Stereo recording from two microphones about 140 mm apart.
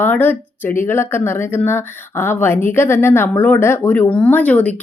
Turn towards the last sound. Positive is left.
turn(degrees=10)  # may be behind; listen again after turning